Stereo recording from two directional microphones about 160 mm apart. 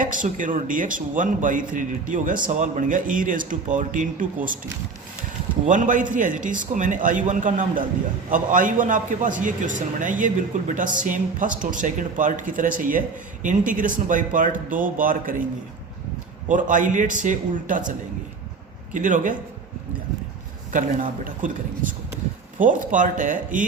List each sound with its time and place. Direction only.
0.0 s a man's voice: 55° right (ahead or behind)
5.6 s a man's voice: 55° right (ahead or behind)
16.5 s a man's voice: 55° right (ahead or behind)
18.9 s a man's voice: 55° right (ahead or behind)
20.7 s a man's voice: 55° right (ahead or behind)